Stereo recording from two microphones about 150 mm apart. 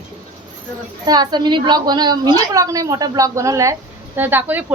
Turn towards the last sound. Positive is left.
turn(degrees=-10)  # may be behind; listen again after turning